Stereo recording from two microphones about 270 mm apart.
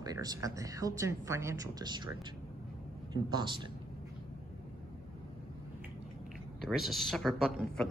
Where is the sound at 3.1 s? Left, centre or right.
Centre.